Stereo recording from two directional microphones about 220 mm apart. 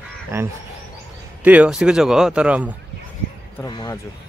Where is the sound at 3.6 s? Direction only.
15° left (ahead or behind).